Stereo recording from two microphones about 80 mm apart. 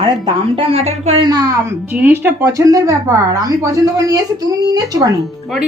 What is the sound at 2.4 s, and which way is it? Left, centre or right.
A woman's voice, right.